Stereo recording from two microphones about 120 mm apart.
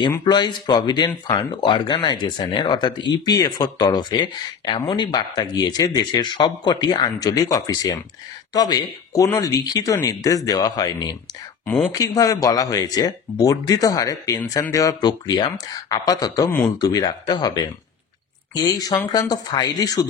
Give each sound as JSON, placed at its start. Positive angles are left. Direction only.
{"t": 0.2, "sound": "speech", "side_deg": 35}